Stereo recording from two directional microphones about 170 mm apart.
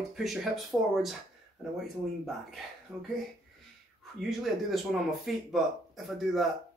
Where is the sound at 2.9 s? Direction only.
25° right (ahead or behind).